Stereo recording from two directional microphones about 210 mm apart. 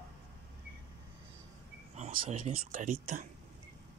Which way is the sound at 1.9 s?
35° right (ahead or behind).